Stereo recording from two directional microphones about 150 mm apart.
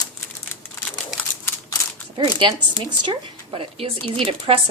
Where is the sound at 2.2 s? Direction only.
35° right (ahead or behind).